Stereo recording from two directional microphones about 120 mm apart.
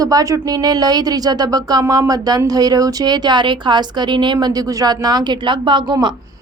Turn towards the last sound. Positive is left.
turn(degrees=-40)  # may be behind; listen again after turning